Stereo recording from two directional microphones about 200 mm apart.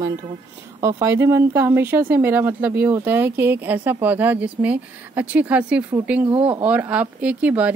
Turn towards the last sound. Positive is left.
turn(degrees=-5)  # may be behind; listen again after turning